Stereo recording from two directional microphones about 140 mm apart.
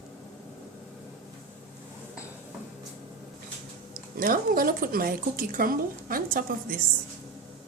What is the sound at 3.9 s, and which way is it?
Speech, 85° right.